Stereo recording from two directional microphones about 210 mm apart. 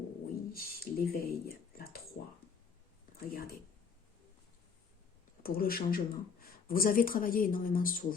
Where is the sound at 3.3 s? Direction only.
45° left (ahead or behind).